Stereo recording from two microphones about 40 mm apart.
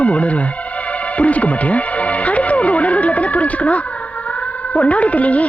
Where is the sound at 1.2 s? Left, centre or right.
Left.